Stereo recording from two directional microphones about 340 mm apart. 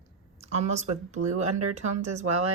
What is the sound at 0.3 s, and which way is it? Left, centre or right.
Speech, centre.